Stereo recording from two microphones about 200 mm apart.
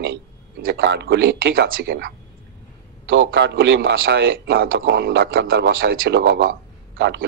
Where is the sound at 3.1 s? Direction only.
60° right (ahead or behind).